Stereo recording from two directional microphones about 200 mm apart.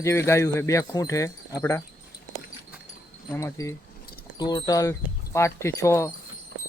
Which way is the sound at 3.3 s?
15° left (ahead or behind).